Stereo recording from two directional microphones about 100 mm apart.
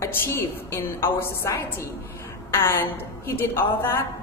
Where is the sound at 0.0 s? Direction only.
25° left (ahead or behind).